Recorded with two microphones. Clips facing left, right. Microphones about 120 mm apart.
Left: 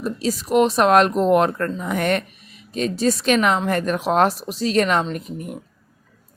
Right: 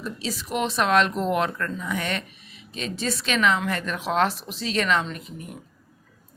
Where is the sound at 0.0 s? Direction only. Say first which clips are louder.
Left 8 dB; 45° left (ahead or behind).